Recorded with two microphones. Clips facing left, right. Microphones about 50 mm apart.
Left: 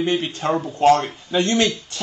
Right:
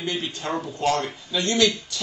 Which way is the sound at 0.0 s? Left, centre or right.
Left.